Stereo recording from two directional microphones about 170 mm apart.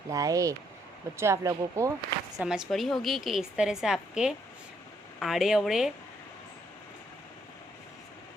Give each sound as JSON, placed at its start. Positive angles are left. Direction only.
{"t": 0.1, "sound": "speech", "side_deg": -20}
{"t": 2.4, "sound": "a woman's voice", "side_deg": -5}